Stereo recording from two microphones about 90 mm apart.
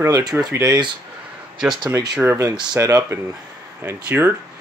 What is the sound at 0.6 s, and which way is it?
Speech, 50° right (ahead or behind).